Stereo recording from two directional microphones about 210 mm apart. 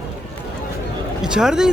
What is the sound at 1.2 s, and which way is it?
Speech, 5° right (ahead or behind).